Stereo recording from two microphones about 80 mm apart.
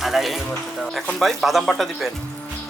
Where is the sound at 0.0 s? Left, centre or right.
Centre.